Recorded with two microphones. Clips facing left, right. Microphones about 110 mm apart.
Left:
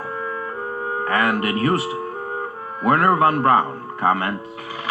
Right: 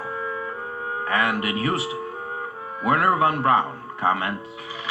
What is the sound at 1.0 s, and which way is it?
A man's voice, 45° left (ahead or behind).